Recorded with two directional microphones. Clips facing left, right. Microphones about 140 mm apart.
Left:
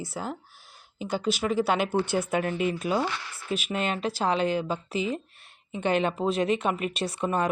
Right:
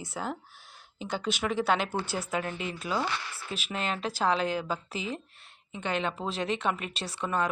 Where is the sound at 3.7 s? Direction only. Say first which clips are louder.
Left 2 dB; 5° left (ahead or behind).